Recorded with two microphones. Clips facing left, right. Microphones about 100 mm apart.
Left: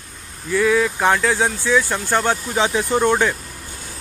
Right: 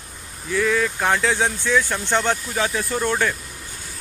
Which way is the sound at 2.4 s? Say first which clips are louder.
Left 4 dB; 20° left (ahead or behind).